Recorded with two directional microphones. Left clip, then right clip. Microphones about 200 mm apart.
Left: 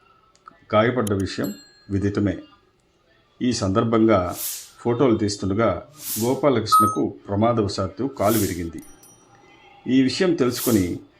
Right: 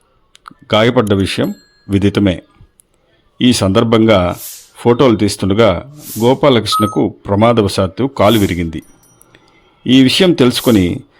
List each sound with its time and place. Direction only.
0.4 s clicking: 45° right (ahead or behind)
1.1 s speech: 45° right (ahead or behind)
4.4 s a sound: centre (ahead or behind)
4.8 s speech: 50° right (ahead or behind)
5.9 s speech: centre (ahead or behind)
6.4 s speech: 50° right (ahead or behind)
8.4 s speech: centre (ahead or behind)
9.8 s speech: 50° right (ahead or behind)
10.6 s speech: centre (ahead or behind)